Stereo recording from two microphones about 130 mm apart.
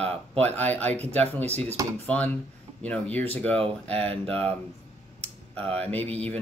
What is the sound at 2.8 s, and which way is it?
Speech, 10° left (ahead or behind).